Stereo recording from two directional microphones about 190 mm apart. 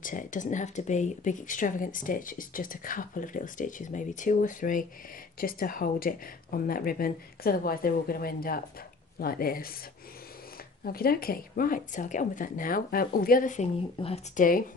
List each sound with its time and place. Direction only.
0.0 s speech: 45° left (ahead or behind)
10.8 s speech: 50° left (ahead or behind)
13.9 s speech: 30° left (ahead or behind)